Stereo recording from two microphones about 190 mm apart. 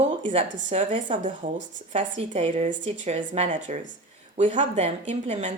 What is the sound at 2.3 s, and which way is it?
Speech, 35° right (ahead or behind).